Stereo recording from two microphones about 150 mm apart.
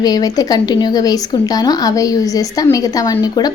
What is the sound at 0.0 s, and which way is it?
Speech, 25° left (ahead or behind).